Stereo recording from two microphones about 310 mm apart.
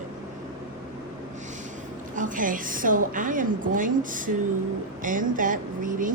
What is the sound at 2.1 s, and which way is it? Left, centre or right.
A woman's voice, right.